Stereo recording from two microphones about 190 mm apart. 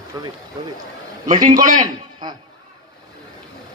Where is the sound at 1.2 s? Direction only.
40° right (ahead or behind).